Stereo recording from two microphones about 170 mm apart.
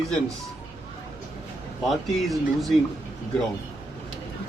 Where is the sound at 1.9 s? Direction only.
Centre (ahead or behind).